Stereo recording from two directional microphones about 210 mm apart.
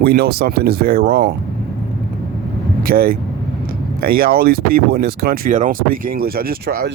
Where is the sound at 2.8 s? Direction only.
45° right (ahead or behind).